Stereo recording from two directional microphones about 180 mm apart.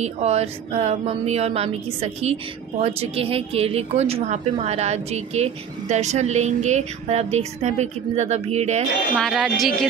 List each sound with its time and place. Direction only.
0.0 s speech: 35° right (ahead or behind)
9.1 s speech: centre (ahead or behind)